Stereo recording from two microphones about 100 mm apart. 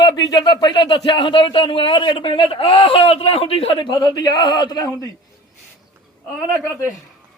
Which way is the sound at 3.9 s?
45° left (ahead or behind).